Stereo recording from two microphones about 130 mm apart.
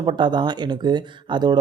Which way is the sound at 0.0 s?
35° right (ahead or behind).